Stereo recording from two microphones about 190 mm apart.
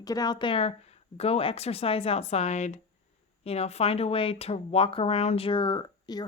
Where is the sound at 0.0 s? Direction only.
20° left (ahead or behind).